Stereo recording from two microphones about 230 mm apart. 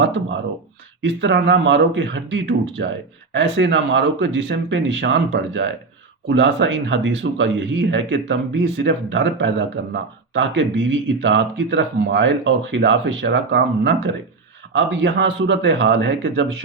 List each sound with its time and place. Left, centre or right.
1.0 s speech: right